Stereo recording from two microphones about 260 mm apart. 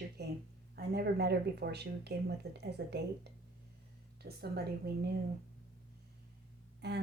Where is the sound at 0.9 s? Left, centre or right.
Right.